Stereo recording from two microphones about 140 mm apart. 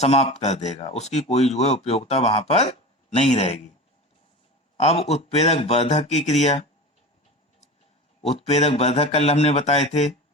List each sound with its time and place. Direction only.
0.0 s speech: 50° left (ahead or behind)
4.8 s speech: 50° left (ahead or behind)
8.2 s speech: 50° left (ahead or behind)